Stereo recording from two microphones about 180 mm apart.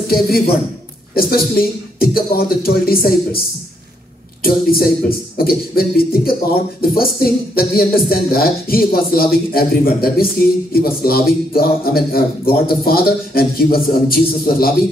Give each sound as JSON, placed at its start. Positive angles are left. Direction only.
{"t": 0.1, "sound": "speech", "side_deg": 55}